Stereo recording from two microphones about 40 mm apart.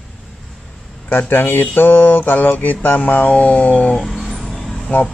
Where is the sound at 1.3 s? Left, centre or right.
Left.